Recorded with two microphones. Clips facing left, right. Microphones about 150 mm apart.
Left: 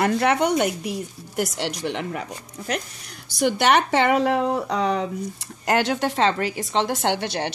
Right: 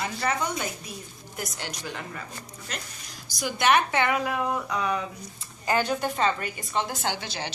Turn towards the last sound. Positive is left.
turn(degrees=65)  # may be behind; listen again after turning